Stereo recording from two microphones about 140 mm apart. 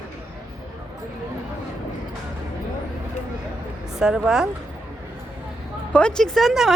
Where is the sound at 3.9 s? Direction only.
5° right (ahead or behind).